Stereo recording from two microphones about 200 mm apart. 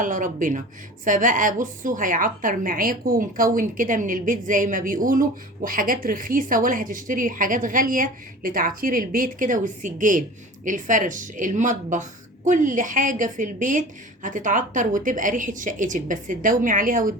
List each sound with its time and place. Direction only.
0.0 s a woman's voice: 40° right (ahead or behind)